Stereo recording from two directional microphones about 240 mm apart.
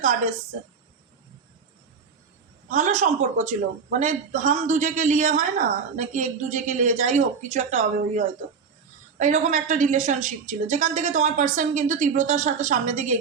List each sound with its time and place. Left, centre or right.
2.6 s a man's voice: right